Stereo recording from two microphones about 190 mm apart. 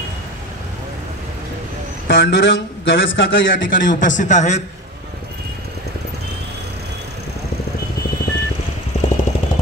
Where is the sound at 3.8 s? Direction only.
40° left (ahead or behind).